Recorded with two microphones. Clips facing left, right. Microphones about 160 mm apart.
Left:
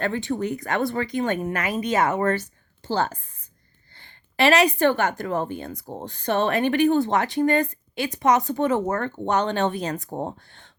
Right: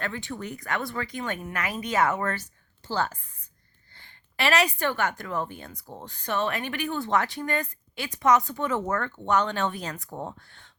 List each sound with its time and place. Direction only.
0.0 s speech: 30° left (ahead or behind)
4.4 s speech: 20° left (ahead or behind)